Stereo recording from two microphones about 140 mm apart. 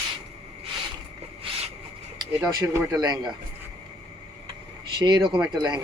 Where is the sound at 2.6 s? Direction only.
25° right (ahead or behind).